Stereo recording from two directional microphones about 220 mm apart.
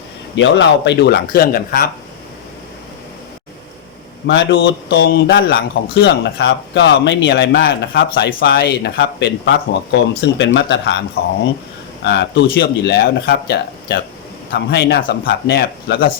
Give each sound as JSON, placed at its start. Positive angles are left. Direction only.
{"t": 0.3, "sound": "a man's voice", "side_deg": 55}
{"t": 4.3, "sound": "a man's voice", "side_deg": 50}
{"t": 11.2, "sound": "speech", "side_deg": 70}
{"t": 12.0, "sound": "a man's voice", "side_deg": 50}